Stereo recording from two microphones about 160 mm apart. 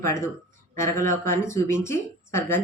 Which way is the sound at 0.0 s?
15° left (ahead or behind).